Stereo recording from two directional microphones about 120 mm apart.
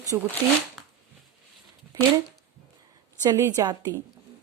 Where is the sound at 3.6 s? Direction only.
35° right (ahead or behind).